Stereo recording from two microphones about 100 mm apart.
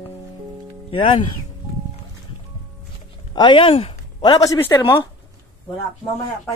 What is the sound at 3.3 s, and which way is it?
Speech, 55° left (ahead or behind).